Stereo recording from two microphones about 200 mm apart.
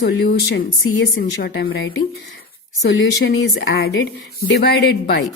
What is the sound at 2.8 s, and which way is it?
Speech, 60° left (ahead or behind).